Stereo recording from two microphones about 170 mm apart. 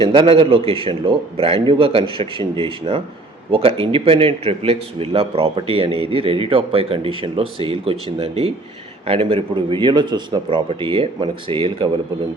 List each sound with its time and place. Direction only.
0.0 s a man's voice: 30° right (ahead or behind)